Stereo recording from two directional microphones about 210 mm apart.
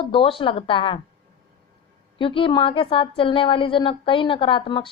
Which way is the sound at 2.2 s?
25° left (ahead or behind).